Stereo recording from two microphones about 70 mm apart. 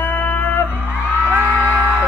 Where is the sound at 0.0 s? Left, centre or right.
Left.